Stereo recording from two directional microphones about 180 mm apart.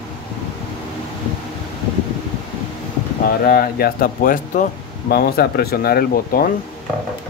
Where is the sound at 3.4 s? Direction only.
55° left (ahead or behind).